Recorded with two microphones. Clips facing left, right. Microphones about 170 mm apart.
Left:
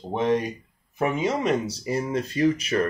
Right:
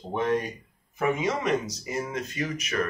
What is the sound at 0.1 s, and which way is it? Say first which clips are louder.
Speech: left 3 dB; 20° left (ahead or behind).